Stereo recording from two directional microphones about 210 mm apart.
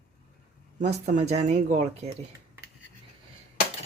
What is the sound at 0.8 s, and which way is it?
Speech, 30° right (ahead or behind).